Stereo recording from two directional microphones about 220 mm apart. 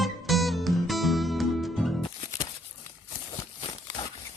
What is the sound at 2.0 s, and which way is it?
Music, 20° left (ahead or behind).